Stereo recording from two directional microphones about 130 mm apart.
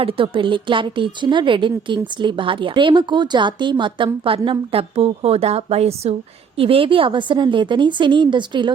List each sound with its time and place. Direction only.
0.0 s a woman's voice: 45° right (ahead or behind)